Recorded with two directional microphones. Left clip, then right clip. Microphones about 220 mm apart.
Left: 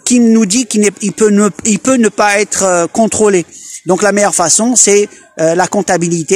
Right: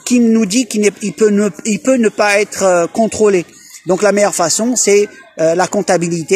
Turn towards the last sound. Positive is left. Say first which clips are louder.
# left 1 dB
turn(degrees=35)  # may be behind; listen again after turning